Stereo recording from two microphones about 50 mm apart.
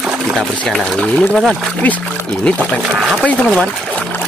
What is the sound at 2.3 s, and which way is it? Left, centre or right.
Speech, centre.